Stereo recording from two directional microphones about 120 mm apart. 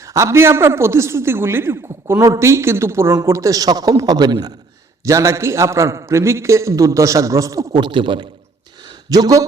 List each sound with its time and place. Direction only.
0.0 s a woman's voice: 25° right (ahead or behind)
7.8 s a man's voice: 40° right (ahead or behind)
8.8 s a sound: 35° right (ahead or behind)